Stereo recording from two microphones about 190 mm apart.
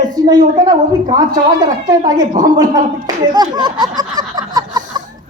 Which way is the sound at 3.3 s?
20° right (ahead or behind).